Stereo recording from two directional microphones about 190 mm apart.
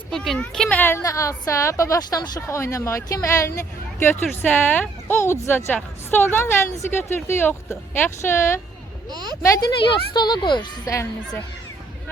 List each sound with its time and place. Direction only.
0.1 s speech: centre (ahead or behind)
9.0 s speech: 20° right (ahead or behind)
9.4 s speech: 20° left (ahead or behind)